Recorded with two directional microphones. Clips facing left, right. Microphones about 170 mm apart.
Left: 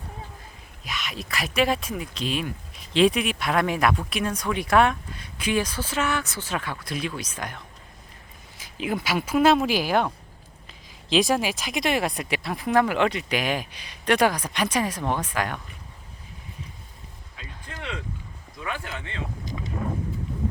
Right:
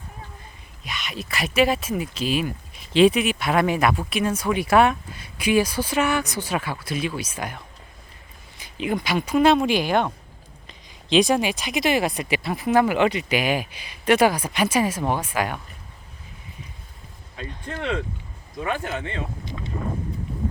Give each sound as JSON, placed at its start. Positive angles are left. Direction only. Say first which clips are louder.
{"t": 0.9, "sound": "speech", "louder": "right 1 dB", "side_deg": 0}
{"t": 8.5, "sound": "speech", "louder": "right 3 dB", "side_deg": 0}
{"t": 17.3, "sound": "speech", "louder": "right 9 dB", "side_deg": -35}